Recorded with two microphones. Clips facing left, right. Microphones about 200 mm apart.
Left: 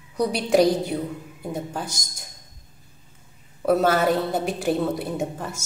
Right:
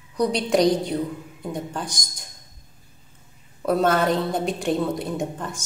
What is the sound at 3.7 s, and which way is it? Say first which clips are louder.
A woman's voice: left 1 dB; 5° left (ahead or behind).